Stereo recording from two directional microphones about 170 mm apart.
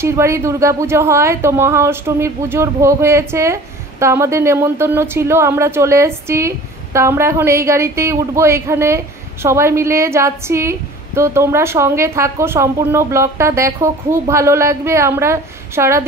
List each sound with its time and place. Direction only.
0.0 s speech: 15° right (ahead or behind)